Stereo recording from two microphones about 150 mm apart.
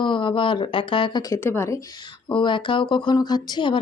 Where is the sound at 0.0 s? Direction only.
30° left (ahead or behind); by 1.8 s 15° left (ahead or behind).